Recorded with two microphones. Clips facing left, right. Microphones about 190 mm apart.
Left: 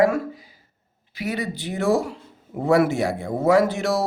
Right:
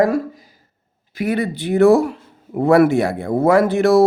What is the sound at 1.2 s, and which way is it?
Speech, 55° right (ahead or behind).